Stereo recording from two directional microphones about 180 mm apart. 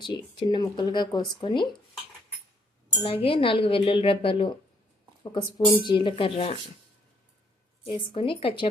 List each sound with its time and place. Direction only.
0.0 s speech: 25° left (ahead or behind)
2.9 s speech: 30° left (ahead or behind)
7.9 s speech: 30° left (ahead or behind)